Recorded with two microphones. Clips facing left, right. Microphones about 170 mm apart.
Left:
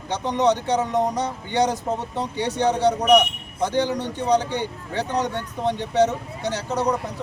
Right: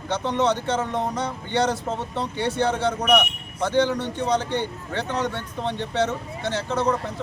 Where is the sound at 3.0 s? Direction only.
40° left (ahead or behind).